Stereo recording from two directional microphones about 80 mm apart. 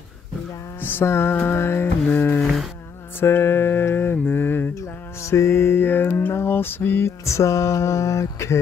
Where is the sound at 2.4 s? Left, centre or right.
Centre.